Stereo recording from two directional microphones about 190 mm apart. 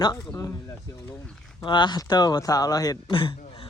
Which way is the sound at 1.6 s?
25° left (ahead or behind).